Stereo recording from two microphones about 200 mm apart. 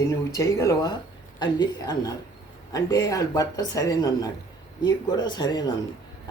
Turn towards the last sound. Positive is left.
turn(degrees=20)  # may be behind; listen again after turning